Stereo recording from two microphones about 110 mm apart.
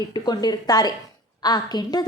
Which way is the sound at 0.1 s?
40° left (ahead or behind).